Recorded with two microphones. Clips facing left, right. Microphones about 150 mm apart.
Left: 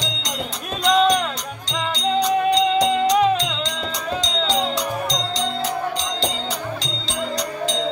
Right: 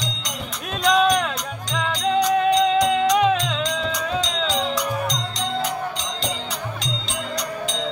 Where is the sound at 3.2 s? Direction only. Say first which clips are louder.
Left 1 dB; centre (ahead or behind).